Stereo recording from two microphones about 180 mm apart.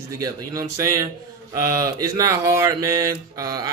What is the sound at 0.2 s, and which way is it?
Speech, 20° right (ahead or behind).